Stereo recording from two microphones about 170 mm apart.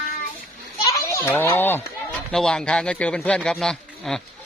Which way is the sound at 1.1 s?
10° left (ahead or behind).